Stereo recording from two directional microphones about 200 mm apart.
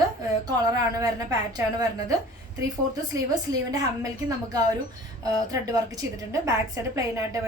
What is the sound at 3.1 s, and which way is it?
A woman's voice, 15° right (ahead or behind).